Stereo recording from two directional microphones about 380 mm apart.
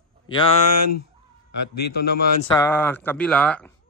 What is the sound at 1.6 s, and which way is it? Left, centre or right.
Speech, left.